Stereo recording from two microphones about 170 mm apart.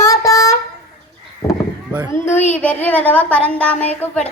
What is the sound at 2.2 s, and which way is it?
Speech, 45° left (ahead or behind).